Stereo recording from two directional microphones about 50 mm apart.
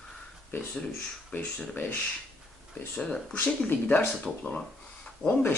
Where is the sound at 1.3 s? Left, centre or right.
Left.